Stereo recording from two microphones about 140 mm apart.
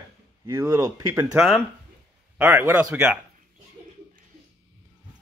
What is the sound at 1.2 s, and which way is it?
Speech, 5° right (ahead or behind).